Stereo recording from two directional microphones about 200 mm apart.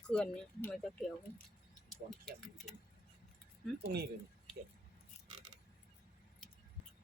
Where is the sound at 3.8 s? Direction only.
55° right (ahead or behind).